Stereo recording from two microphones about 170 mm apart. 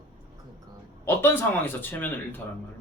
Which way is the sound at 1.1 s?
15° left (ahead or behind).